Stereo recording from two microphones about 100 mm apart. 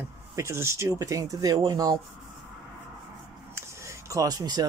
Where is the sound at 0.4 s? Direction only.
25° right (ahead or behind).